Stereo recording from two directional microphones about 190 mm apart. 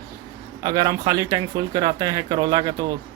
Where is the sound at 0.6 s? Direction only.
20° right (ahead or behind).